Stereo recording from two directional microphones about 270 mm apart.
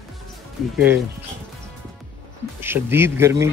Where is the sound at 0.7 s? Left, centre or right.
Centre.